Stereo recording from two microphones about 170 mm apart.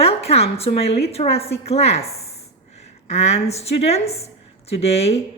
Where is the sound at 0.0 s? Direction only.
35° left (ahead or behind).